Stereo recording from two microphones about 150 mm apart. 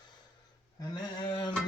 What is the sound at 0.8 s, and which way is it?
Speech, 30° left (ahead or behind).